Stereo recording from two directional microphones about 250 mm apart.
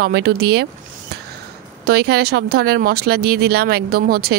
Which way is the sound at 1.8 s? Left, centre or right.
Right.